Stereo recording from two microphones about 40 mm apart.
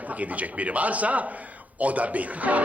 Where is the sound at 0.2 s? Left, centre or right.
Right.